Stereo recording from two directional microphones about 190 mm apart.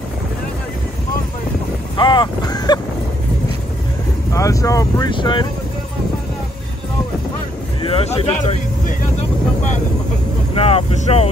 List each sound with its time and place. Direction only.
2.0 s a sound: 25° left (ahead or behind)
4.3 s speech: 15° left (ahead or behind)
7.8 s speech: 30° left (ahead or behind)
10.5 s speech: 30° left (ahead or behind)